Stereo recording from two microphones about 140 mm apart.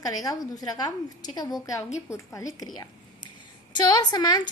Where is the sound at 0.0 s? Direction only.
25° left (ahead or behind).